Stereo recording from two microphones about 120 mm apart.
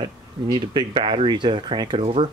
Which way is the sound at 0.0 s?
45° right (ahead or behind).